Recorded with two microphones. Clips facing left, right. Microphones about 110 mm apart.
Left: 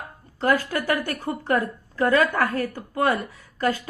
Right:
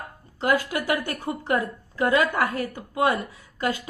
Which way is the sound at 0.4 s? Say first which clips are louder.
Left 1 dB; 20° right (ahead or behind).